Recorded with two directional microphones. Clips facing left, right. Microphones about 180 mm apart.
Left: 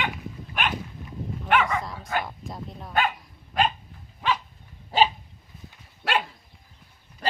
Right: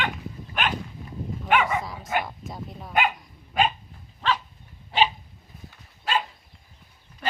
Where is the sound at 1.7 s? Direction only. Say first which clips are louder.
Right 1 dB; 5° right (ahead or behind).